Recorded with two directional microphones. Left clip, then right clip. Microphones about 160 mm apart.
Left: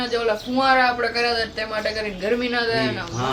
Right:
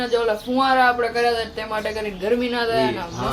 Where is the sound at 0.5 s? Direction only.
5° right (ahead or behind).